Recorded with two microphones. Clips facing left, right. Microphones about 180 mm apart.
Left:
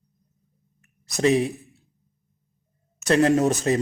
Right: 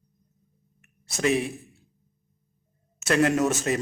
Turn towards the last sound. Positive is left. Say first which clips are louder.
# left 4 dB
turn(degrees=35)  # may be behind; listen again after turning